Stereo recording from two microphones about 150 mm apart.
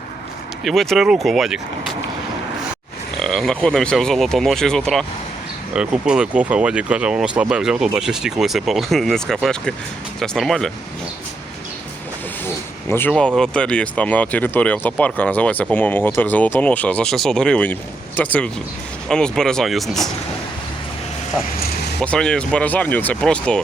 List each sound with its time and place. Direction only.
0.6 s speech: centre (ahead or behind)
3.2 s speech: centre (ahead or behind)
12.9 s speech: 10° left (ahead or behind)
21.6 s vehicle: 90° left
22.0 s speech: 5° left (ahead or behind)